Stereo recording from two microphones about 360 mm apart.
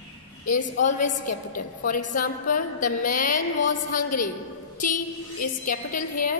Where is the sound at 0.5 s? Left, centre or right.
Left.